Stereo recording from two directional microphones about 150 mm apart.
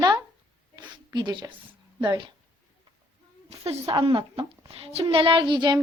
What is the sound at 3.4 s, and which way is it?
A woman's voice, 40° right (ahead or behind).